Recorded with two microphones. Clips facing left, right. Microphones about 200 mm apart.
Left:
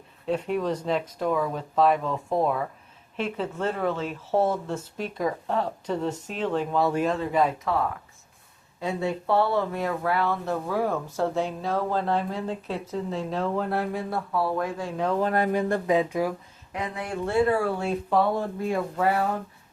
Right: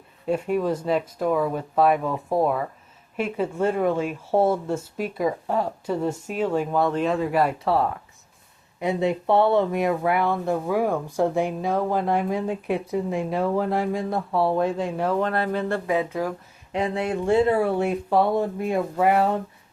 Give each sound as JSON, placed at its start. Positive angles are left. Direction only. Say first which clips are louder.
{"t": 0.3, "sound": "speech", "louder": "right 3 dB", "side_deg": -10}
{"t": 6.8, "sound": "speech", "louder": "right 2 dB", "side_deg": 5}
{"t": 7.2, "sound": "speech", "louder": "right 2 dB", "side_deg": -10}
{"t": 7.6, "sound": "speech", "louder": "right 4 dB", "side_deg": -30}
{"t": 8.8, "sound": "speech", "louder": "right 5 dB", "side_deg": -20}
{"t": 14.3, "sound": "speech", "louder": "right 5 dB", "side_deg": -25}
{"t": 15.2, "sound": "speech", "louder": "even", "side_deg": 15}
{"t": 16.7, "sound": "speech", "louder": "right 6 dB", "side_deg": -30}